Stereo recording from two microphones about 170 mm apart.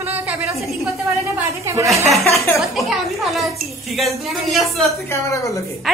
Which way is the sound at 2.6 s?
Centre (ahead or behind).